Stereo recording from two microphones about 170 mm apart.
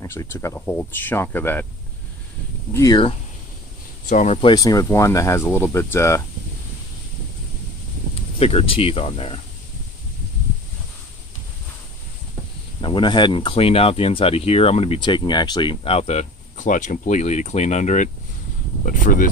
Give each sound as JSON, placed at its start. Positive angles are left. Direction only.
{"t": 0.0, "sound": "speech", "side_deg": 15}
{"t": 2.7, "sound": "speech", "side_deg": 20}
{"t": 4.1, "sound": "speech", "side_deg": 45}
{"t": 4.6, "sound": "speech", "side_deg": 20}
{"t": 8.1, "sound": "speech", "side_deg": 35}
{"t": 12.8, "sound": "speech", "side_deg": 30}